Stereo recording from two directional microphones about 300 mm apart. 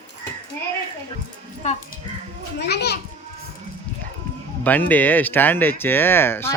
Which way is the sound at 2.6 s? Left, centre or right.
Left.